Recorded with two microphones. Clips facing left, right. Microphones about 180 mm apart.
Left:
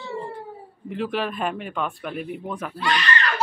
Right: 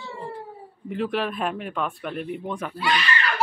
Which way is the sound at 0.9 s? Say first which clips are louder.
Even; centre (ahead or behind).